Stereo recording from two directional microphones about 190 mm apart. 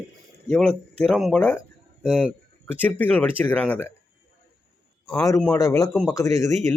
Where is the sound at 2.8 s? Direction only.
10° left (ahead or behind).